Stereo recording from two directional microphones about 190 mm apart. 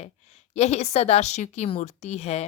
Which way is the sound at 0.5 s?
35° left (ahead or behind).